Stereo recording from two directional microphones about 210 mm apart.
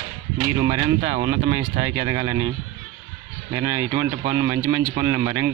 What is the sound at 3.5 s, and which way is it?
Speech, 10° right (ahead or behind).